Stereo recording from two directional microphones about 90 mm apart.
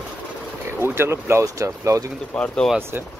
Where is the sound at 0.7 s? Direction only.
25° right (ahead or behind).